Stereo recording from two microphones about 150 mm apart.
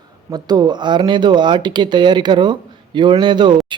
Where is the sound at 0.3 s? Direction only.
25° right (ahead or behind).